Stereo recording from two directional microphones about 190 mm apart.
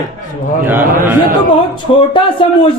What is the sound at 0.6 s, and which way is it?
Speech, 10° right (ahead or behind).